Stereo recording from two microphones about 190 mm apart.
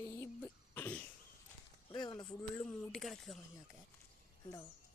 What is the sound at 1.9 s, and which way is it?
Speech, 25° left (ahead or behind).